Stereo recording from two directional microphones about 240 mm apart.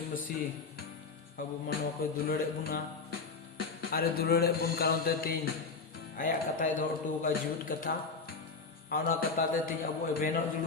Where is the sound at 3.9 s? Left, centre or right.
Left.